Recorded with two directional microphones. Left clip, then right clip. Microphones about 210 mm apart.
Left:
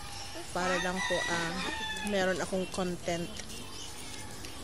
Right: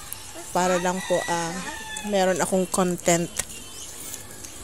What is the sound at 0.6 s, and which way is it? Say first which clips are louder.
Speech: right 8 dB; 40° right (ahead or behind).